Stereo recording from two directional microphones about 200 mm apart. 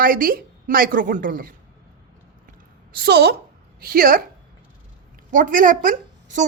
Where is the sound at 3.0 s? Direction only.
55° right (ahead or behind).